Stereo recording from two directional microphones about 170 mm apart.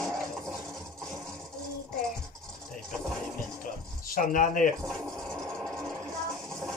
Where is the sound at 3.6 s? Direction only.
55° left (ahead or behind).